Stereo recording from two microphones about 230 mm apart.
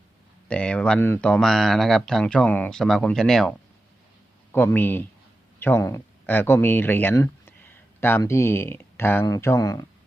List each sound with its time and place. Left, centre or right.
0.4 s speech: centre
4.5 s speech: centre